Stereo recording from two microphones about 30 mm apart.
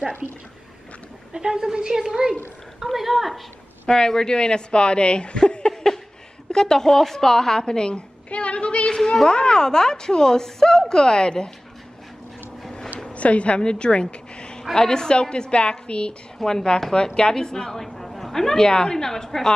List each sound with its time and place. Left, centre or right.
1.5 s a woman's voice: right
2.9 s a woman's voice: centre
3.8 s a woman's voice: left
5.6 s a sound: left
6.5 s a woman's voice: left
8.3 s a woman's voice: left
8.9 s a woman's voice: centre
13.1 s a woman's voice: left
13.6 s a woman's voice: left
14.0 s a sound: left
14.8 s a woman's voice: left
18.0 s a sound: centre
18.3 s a woman's voice: centre
18.7 s a woman's voice: left